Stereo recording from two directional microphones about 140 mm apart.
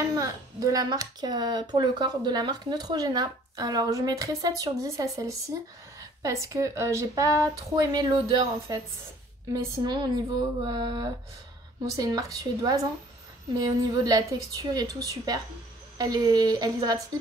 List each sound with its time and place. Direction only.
0.2 s speech: 25° right (ahead or behind)
10.7 s a sound: 30° right (ahead or behind)
11.8 s speech: 25° right (ahead or behind)